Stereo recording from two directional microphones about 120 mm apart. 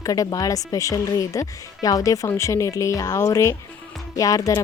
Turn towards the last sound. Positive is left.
turn(degrees=30)  # may be behind; listen again after turning